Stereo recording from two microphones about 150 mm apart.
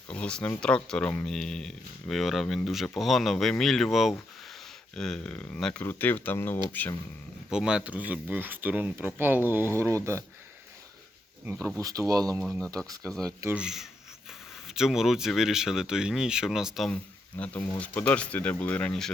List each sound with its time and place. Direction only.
0.1 s speech: 5° left (ahead or behind)
7.5 s speech: 5° right (ahead or behind)
11.6 s speech: 25° right (ahead or behind)
12.4 s speech: 5° left (ahead or behind)
17.3 s speech: 10° left (ahead or behind)